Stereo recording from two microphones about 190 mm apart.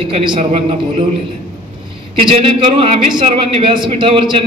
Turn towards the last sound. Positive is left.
turn(degrees=-30)  # may be behind; listen again after turning